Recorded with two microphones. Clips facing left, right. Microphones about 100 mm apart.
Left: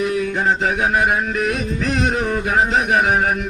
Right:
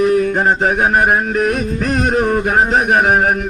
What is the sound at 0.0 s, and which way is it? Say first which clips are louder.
Music: right 6 dB; 45° right (ahead or behind).